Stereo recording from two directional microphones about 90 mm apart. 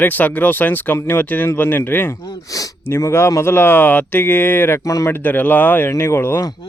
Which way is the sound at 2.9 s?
30° left (ahead or behind).